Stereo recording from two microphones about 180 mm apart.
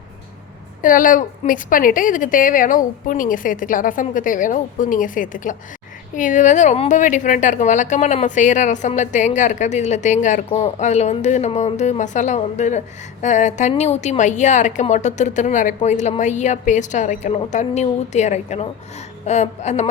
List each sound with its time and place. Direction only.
0.8 s a woman's voice: 50° left (ahead or behind)